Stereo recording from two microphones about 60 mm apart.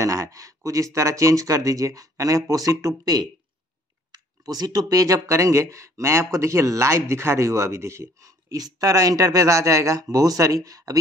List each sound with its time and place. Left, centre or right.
0.0 s speech: right
4.5 s speech: right